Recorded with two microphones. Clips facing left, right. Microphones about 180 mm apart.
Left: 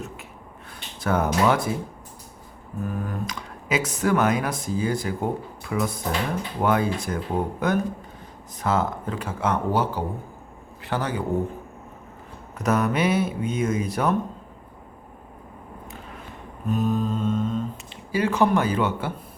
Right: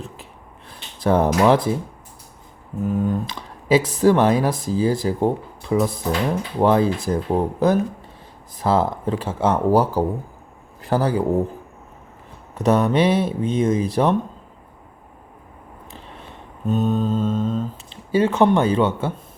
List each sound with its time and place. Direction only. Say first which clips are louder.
0.7 s speech: right 6 dB; 30° right (ahead or behind)
2.8 s speech: right 8 dB; 20° right (ahead or behind)
12.5 s speech: right 5 dB; 30° right (ahead or behind)
16.6 s speech: right 3 dB; 25° right (ahead or behind)